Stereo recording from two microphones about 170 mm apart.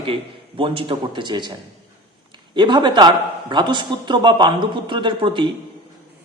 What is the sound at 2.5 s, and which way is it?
A man's voice, 25° right (ahead or behind).